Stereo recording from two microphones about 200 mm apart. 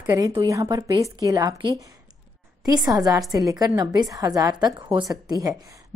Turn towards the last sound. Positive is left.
turn(degrees=-20)  # may be behind; listen again after turning